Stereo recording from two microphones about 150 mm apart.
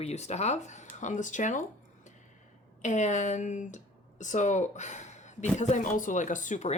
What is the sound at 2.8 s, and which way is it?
Speech, 55° left (ahead or behind).